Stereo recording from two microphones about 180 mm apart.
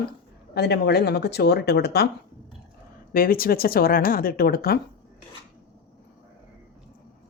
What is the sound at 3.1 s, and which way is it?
Speech, 55° left (ahead or behind).